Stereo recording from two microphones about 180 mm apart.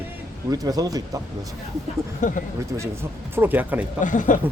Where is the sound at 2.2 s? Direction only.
45° left (ahead or behind).